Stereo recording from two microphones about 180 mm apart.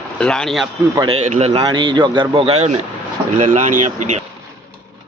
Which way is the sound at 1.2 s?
35° right (ahead or behind).